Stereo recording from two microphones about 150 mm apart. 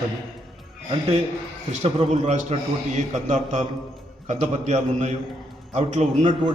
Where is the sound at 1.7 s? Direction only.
45° right (ahead or behind).